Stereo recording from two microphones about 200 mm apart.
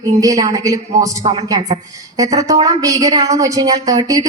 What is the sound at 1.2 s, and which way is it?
Speech, 30° right (ahead or behind).